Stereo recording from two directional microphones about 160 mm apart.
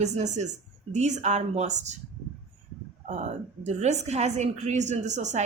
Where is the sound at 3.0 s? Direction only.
50° right (ahead or behind).